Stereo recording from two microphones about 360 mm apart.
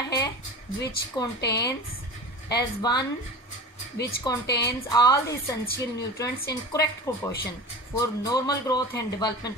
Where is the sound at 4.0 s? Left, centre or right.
Left.